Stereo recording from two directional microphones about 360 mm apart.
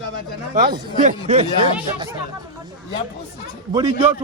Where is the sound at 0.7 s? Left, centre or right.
Centre.